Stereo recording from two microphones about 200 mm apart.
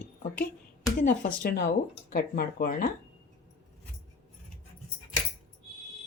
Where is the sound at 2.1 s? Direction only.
50° left (ahead or behind).